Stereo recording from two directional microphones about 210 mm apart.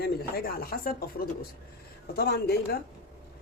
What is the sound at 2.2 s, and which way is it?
Speech, 50° left (ahead or behind).